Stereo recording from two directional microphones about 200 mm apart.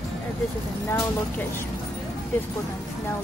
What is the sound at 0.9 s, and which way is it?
Speech, 10° left (ahead or behind).